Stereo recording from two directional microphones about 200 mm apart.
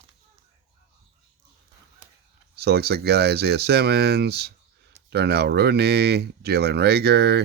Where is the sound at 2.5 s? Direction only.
55° right (ahead or behind).